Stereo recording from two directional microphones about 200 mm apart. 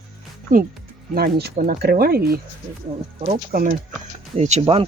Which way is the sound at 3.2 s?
35° right (ahead or behind).